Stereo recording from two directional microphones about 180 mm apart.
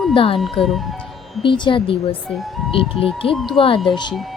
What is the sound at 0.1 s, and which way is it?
Speech, 30° left (ahead or behind).